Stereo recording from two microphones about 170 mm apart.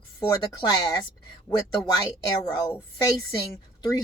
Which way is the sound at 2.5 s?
25° left (ahead or behind).